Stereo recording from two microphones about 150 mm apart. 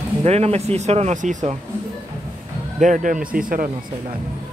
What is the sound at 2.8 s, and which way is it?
Speech, 60° right (ahead or behind).